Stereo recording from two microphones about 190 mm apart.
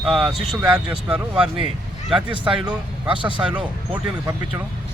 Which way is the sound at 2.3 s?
25° right (ahead or behind).